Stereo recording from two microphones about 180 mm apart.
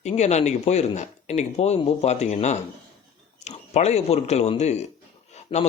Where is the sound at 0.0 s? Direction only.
40° left (ahead or behind).